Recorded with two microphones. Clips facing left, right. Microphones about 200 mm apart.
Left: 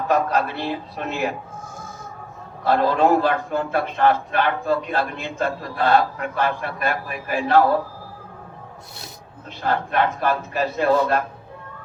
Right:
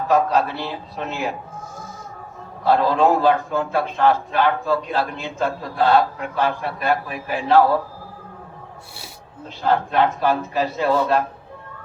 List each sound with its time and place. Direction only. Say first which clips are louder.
0.1 s a man's voice: right 2 dB; 55° left (ahead or behind)
2.6 s a man's voice: right 1 dB; 55° left (ahead or behind)
9.6 s a man's voice: right 3 dB; 55° left (ahead or behind)